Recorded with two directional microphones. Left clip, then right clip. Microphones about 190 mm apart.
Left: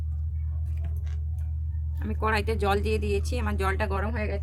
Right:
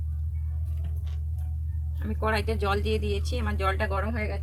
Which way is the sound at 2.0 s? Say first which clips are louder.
Left 1 dB; 60° left (ahead or behind).